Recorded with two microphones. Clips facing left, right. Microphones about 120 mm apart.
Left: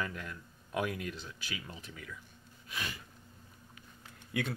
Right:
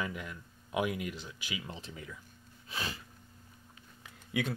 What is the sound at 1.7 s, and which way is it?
Speech, 25° right (ahead or behind).